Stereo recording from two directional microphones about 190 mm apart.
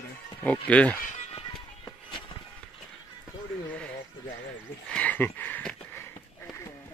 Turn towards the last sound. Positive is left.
turn(degrees=10)  # may be behind; listen again after turning